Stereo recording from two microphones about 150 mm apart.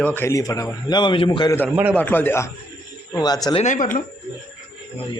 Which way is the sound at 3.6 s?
60° left (ahead or behind).